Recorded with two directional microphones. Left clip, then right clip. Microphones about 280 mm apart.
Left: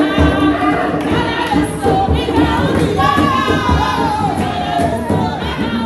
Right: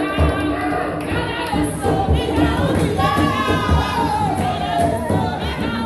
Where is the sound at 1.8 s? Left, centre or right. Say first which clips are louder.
Left 5 dB; centre.